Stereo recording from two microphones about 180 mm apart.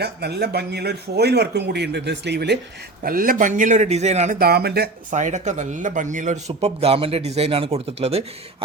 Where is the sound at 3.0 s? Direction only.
50° right (ahead or behind).